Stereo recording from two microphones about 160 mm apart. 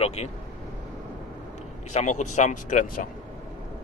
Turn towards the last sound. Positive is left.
turn(degrees=50)  # may be behind; listen again after turning